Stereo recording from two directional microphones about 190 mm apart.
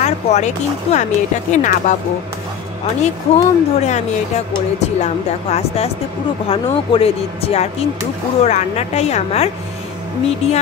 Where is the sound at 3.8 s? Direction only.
35° left (ahead or behind).